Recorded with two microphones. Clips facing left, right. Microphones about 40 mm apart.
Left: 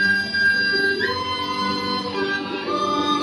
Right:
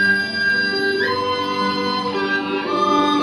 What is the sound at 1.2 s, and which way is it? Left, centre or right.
Music, right.